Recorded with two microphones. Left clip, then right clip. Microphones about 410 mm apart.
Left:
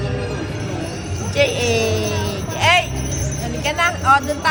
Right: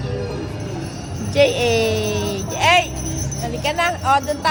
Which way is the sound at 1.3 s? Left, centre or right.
Right.